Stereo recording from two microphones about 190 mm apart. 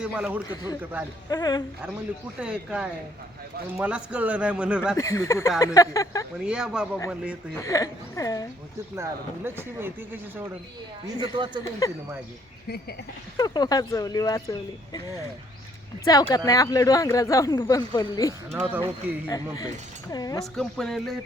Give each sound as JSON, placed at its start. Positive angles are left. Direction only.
{"t": 0.0, "sound": "a sound", "side_deg": -5}
{"t": 0.5, "sound": "speech", "side_deg": 20}
{"t": 2.4, "sound": "a sound", "side_deg": -5}
{"t": 3.8, "sound": "speech", "side_deg": -5}
{"t": 4.9, "sound": "speech", "side_deg": 15}
{"t": 6.4, "sound": "a sound", "side_deg": -5}
{"t": 7.5, "sound": "speech", "side_deg": 15}
{"t": 9.0, "sound": "speech", "side_deg": -10}
{"t": 11.0, "sound": "speech", "side_deg": -25}
{"t": 13.3, "sound": "speech", "side_deg": 20}
{"t": 16.1, "sound": "speech", "side_deg": 20}
{"t": 18.7, "sound": "speech", "side_deg": -10}
{"t": 19.3, "sound": "speech", "side_deg": 20}
{"t": 20.4, "sound": "a sound", "side_deg": 0}